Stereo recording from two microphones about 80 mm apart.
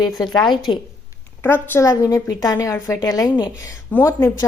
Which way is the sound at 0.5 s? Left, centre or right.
Left.